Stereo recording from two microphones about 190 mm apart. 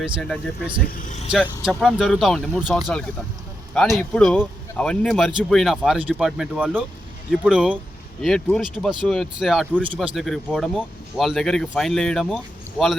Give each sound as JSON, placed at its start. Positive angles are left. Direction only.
{"t": 0.0, "sound": "speech", "side_deg": 0}
{"t": 0.9, "sound": "speech", "side_deg": 45}
{"t": 1.3, "sound": "speech", "side_deg": -5}